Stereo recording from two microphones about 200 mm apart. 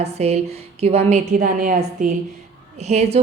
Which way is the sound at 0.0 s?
30° right (ahead or behind).